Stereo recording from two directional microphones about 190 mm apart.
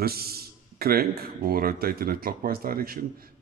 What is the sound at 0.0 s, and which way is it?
A man's voice, 55° right (ahead or behind).